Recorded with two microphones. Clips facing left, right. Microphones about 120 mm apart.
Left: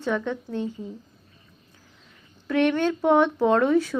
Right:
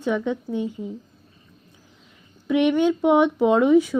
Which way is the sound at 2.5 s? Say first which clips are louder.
Right 3 dB; 15° right (ahead or behind).